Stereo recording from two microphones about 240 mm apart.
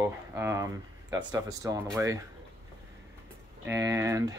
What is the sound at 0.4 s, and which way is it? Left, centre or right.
Speech, centre.